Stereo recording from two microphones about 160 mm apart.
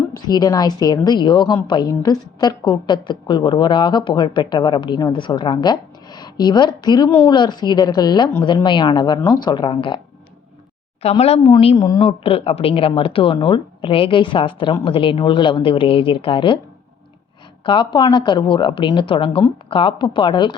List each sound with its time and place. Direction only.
0.3 s a woman's voice: 25° left (ahead or behind)
11.0 s speech: 40° left (ahead or behind)
17.6 s speech: 30° left (ahead or behind)